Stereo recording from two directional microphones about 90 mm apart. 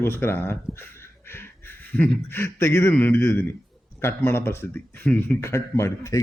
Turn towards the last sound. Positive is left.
turn(degrees=35)  # may be behind; listen again after turning